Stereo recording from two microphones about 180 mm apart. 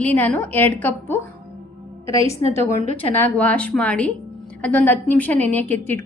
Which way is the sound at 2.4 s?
35° right (ahead or behind).